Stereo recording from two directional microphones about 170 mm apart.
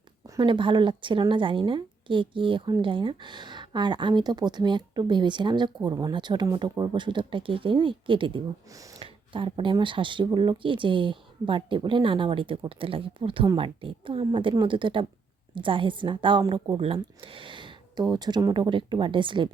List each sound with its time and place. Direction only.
0.3 s a woman's voice: 30° right (ahead or behind)